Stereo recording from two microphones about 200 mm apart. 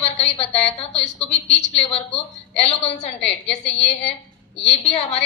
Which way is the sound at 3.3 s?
30° left (ahead or behind).